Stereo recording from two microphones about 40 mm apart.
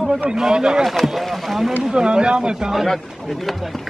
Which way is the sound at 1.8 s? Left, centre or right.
Right.